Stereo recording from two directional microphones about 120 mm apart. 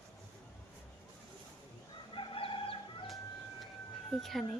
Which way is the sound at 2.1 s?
45° left (ahead or behind).